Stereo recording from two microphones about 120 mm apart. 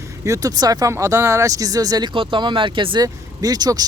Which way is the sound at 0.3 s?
30° right (ahead or behind).